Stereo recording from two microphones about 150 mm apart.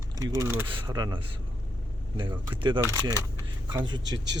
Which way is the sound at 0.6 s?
30° right (ahead or behind).